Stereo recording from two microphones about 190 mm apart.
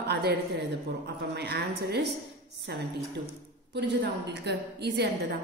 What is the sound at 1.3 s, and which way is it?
Music, 60° right (ahead or behind).